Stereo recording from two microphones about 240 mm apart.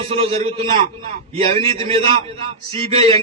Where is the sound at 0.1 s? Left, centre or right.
Right.